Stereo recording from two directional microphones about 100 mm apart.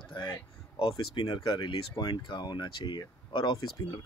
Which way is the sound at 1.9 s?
45° left (ahead or behind).